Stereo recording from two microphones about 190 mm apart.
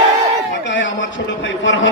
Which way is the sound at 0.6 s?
75° left (ahead or behind).